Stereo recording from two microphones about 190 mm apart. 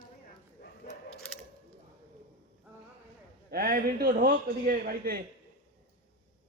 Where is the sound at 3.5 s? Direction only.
50° right (ahead or behind).